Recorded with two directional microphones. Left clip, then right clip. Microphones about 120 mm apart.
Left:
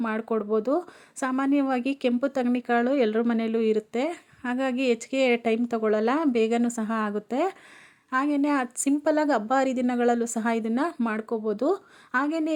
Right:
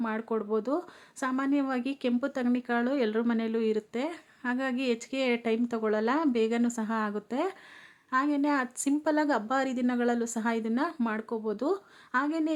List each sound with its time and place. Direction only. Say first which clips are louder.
0.0 s speech: left 4 dB; 35° left (ahead or behind)